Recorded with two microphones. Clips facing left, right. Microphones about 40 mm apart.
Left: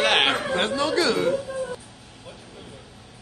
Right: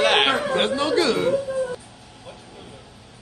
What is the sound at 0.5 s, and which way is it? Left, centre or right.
Speech, right.